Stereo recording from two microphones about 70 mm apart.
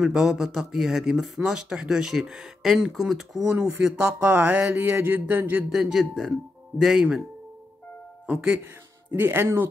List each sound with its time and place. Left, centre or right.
0.0 s speech: centre
3.5 s speech: centre
4.6 s speech: right
5.7 s speech: centre
6.8 s speech: centre
9.1 s speech: right